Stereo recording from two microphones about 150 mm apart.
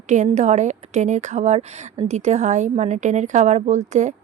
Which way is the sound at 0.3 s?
50° right (ahead or behind).